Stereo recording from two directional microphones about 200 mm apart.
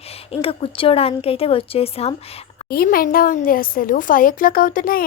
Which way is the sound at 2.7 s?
50° left (ahead or behind).